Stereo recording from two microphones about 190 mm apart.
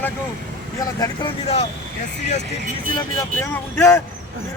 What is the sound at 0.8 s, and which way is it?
Speech, 20° left (ahead or behind).